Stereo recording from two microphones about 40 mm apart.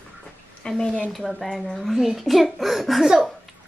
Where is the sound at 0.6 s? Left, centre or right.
Centre.